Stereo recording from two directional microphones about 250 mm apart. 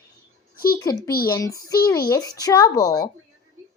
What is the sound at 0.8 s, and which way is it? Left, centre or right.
A woman's voice, centre.